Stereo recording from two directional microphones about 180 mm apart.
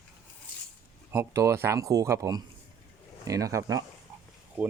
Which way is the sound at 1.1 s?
15° right (ahead or behind).